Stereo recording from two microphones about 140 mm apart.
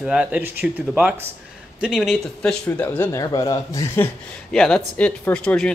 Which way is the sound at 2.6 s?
15° left (ahead or behind).